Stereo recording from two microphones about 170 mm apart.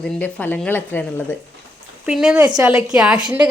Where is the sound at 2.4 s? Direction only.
25° right (ahead or behind).